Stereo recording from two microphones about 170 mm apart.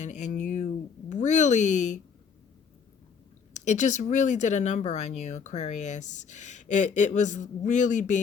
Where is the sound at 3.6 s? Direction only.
45° left (ahead or behind).